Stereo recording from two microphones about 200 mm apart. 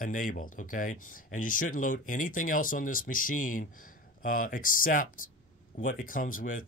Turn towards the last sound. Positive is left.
turn(degrees=40)  # may be behind; listen again after turning